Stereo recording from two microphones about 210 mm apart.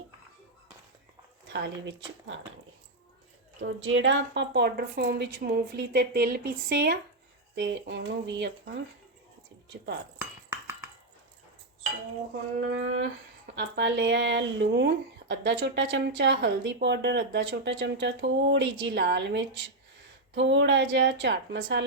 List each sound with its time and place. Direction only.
1.5 s speech: 60° right (ahead or behind)
3.6 s a woman's voice: 65° right (ahead or behind)
10.2 s cutlery: 10° right (ahead or behind)
12.5 s speech: 60° right (ahead or behind)